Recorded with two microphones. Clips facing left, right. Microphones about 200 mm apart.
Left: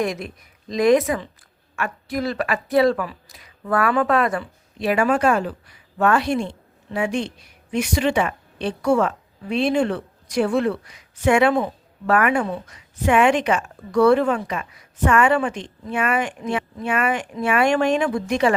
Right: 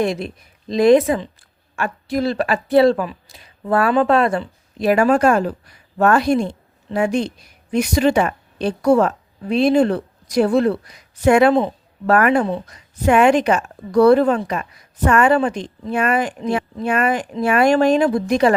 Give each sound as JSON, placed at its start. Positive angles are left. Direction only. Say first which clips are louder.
{"t": 0.0, "sound": "speech", "louder": "right 4 dB", "side_deg": -30}
{"t": 4.8, "sound": "a woman's voice", "louder": "right 4 dB", "side_deg": -40}